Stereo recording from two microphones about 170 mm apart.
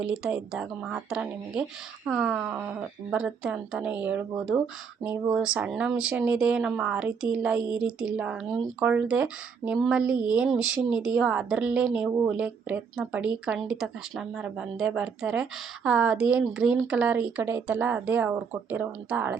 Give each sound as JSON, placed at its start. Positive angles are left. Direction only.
{"t": 0.0, "sound": "speech", "side_deg": -5}